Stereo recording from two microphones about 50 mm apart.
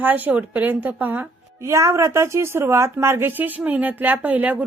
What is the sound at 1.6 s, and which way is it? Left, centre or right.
A woman's voice, right.